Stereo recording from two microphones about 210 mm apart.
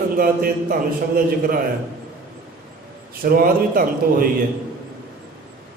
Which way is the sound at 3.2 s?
45° right (ahead or behind).